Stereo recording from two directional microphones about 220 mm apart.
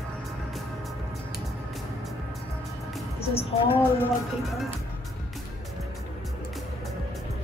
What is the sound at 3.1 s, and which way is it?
Music, 25° left (ahead or behind).